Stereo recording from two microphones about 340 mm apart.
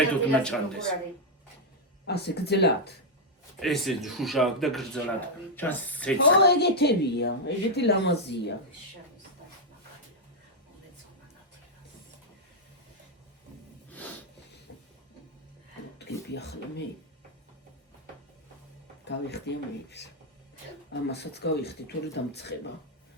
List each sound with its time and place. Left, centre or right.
0.1 s speech: centre
2.0 s a woman's voice: left
3.6 s speech: centre
6.4 s a woman's voice: left
14.7 s a sound: left
16.0 s speech: left
19.0 s a woman's voice: left